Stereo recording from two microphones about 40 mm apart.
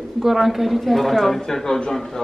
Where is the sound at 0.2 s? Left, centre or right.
Centre.